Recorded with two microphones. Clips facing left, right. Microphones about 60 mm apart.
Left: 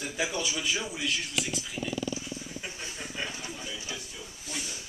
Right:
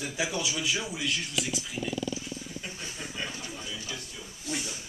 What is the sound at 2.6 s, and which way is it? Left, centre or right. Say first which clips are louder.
Speech: even; centre.